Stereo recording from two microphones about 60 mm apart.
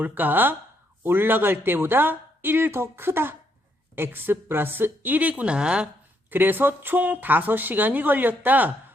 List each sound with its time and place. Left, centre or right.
0.0 s speech: right
5.3 s speech: centre
6.3 s speech: right